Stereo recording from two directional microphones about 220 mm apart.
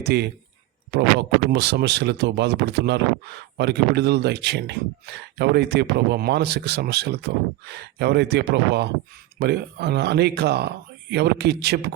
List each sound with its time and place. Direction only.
0.0 s speech: 50° right (ahead or behind)
1.5 s speech: 45° right (ahead or behind)